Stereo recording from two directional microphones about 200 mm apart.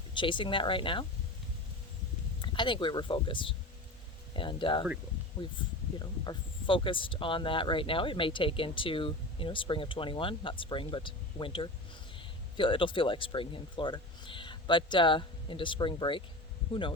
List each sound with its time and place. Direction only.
0.1 s speech: 25° left (ahead or behind)
2.4 s speech: 25° left (ahead or behind)